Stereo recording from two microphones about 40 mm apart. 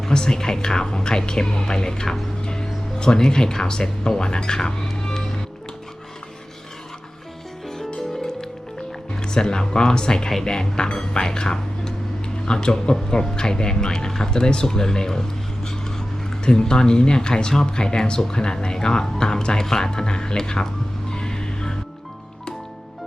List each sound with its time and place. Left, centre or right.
0.1 s speech: centre
9.2 s speech: centre
21.1 s music: centre